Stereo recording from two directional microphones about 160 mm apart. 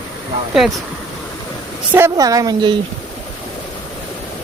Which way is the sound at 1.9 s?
20° right (ahead or behind).